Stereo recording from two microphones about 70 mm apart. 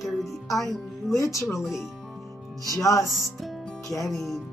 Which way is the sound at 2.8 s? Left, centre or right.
Left.